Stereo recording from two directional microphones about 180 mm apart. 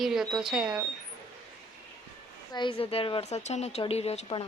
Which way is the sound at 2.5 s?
25° left (ahead or behind).